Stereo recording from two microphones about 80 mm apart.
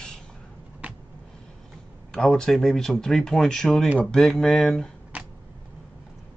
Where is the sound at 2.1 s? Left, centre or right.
Centre.